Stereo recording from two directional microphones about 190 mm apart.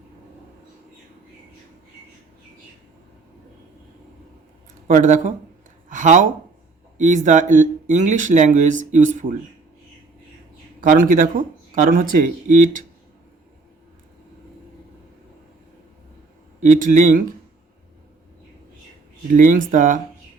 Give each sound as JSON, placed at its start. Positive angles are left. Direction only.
{"t": 4.9, "sound": "speech", "side_deg": -40}
{"t": 10.8, "sound": "speech", "side_deg": -45}
{"t": 16.6, "sound": "speech", "side_deg": -40}
{"t": 19.3, "sound": "speech", "side_deg": -45}